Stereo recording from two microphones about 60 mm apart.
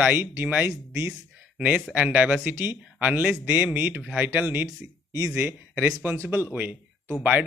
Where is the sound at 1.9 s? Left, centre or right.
Right.